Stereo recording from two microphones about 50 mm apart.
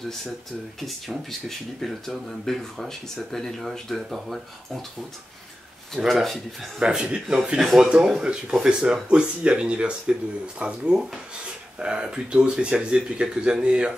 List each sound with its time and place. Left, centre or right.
0.7 s speech: centre
6.2 s speech: centre
6.8 s speech: centre